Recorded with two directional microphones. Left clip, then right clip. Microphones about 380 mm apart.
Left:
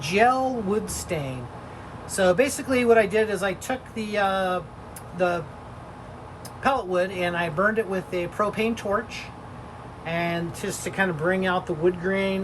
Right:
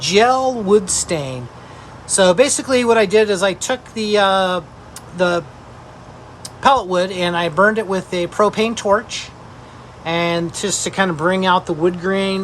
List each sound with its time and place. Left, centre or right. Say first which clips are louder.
0.1 s speech: right 6 dB; centre
6.6 s speech: right 9 dB; centre